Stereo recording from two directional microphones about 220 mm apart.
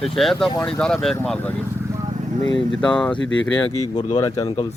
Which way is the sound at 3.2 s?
60° left (ahead or behind).